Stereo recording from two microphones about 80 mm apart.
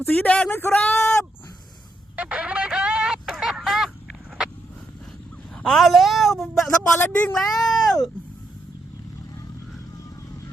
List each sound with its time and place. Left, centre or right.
0.0 s speech: left
0.5 s speech: left
0.9 s a sound: centre
2.1 s music: centre
5.6 s speech: centre
7.0 s speech: centre
7.3 s speech: centre